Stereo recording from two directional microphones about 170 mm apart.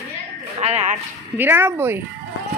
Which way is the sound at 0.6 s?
40° right (ahead or behind).